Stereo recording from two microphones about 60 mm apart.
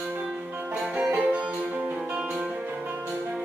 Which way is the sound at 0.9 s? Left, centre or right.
Right.